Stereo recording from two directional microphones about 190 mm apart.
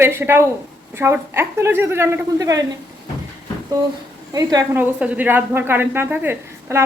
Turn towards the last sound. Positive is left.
turn(degrees=-10)  # may be behind; listen again after turning